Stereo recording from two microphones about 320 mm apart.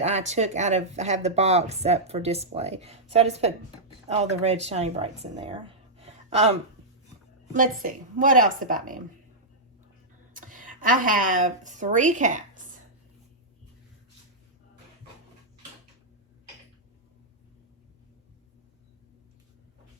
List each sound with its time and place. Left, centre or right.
0.0 s speech: right
10.3 s speech: right